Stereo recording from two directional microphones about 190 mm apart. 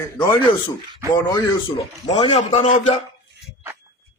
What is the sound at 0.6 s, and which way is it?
Speech, 20° right (ahead or behind).